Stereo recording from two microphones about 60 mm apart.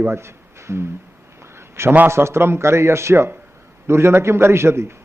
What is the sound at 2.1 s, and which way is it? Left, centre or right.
A man's voice, right.